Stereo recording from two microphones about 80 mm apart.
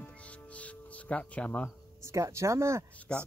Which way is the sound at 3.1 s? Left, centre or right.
Centre.